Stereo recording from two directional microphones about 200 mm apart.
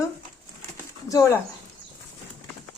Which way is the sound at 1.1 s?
15° left (ahead or behind).